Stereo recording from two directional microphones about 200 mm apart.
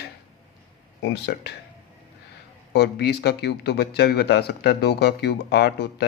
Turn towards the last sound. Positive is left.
turn(degrees=55)  # may be behind; listen again after turning